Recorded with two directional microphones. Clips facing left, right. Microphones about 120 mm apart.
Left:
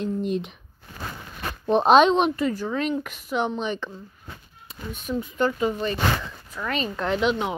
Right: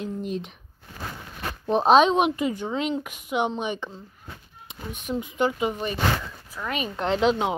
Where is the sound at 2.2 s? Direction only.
15° right (ahead or behind).